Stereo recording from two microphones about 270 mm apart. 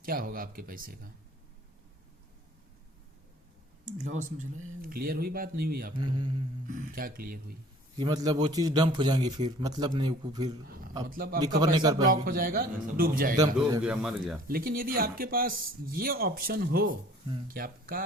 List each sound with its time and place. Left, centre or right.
0.0 s speech: right
4.0 s speech: right
6.0 s a man's voice: centre
6.7 s speech: right
7.9 s a man's voice: centre
10.7 s a sound: right
11.1 s speech: right
11.6 s a man's voice: centre
12.0 s speech: right
13.7 s a man's voice: centre
14.4 s speech: right